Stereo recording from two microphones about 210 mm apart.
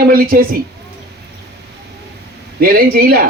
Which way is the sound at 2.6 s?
45° right (ahead or behind).